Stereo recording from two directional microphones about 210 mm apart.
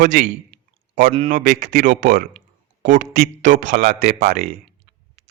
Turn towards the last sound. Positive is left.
turn(degrees=-35)  # may be behind; listen again after turning